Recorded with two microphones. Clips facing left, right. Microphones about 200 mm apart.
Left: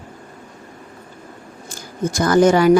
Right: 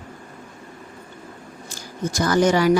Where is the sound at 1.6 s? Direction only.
55° left (ahead or behind).